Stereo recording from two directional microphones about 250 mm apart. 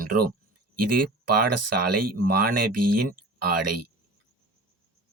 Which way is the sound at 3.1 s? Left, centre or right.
Right.